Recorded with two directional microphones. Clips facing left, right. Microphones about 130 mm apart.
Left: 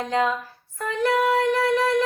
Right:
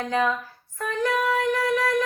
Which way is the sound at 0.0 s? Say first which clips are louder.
Left 1 dB; 20° left (ahead or behind).